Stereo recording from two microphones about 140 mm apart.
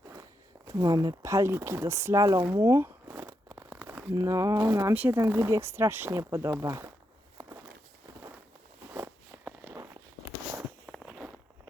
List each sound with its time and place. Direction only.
0.7 s speech: 25° right (ahead or behind)
8.9 s a sound: 15° right (ahead or behind)
10.9 s walk: centre (ahead or behind)